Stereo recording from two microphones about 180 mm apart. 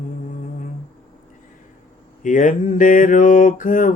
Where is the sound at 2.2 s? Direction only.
45° left (ahead or behind).